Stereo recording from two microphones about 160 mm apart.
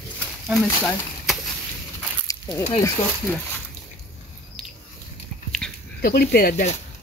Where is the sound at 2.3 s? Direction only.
20° left (ahead or behind).